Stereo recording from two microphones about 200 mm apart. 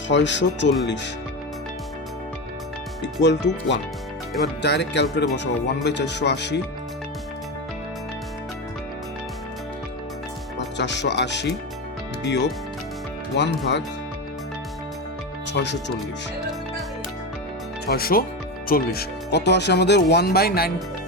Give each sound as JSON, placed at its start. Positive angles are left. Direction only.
{"t": 0.1, "sound": "speech", "side_deg": 65}
{"t": 3.0, "sound": "speech", "side_deg": 60}
{"t": 10.8, "sound": "speech", "side_deg": 60}
{"t": 15.5, "sound": "speech", "side_deg": 60}
{"t": 17.8, "sound": "speech", "side_deg": 50}